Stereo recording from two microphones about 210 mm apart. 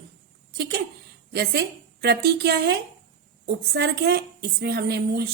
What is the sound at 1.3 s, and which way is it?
A woman's voice, 50° right (ahead or behind).